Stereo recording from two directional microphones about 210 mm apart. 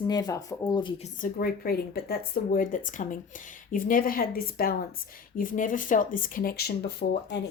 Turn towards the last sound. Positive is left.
turn(degrees=50)  # may be behind; listen again after turning